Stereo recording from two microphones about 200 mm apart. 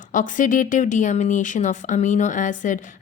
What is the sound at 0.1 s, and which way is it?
A woman's voice, 40° left (ahead or behind).